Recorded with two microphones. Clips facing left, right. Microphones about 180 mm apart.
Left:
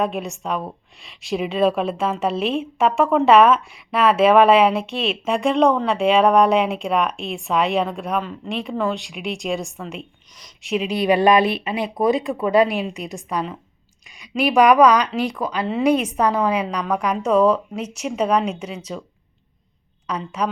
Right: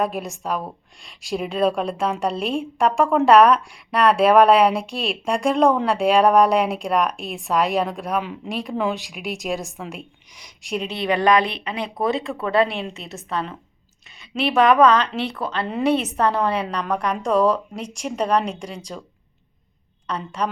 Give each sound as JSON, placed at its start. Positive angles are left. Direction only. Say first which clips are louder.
{"t": 0.0, "sound": "a woman's voice", "louder": "left 1 dB", "side_deg": 0}
{"t": 11.0, "sound": "a woman's voice", "louder": "left 3 dB", "side_deg": 20}
{"t": 14.5, "sound": "a woman's voice", "louder": "left 2 dB", "side_deg": 15}
{"t": 20.1, "sound": "a woman's voice", "louder": "left 1 dB", "side_deg": 10}